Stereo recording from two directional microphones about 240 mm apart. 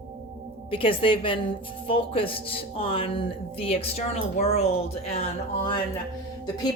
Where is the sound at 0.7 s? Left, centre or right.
Left.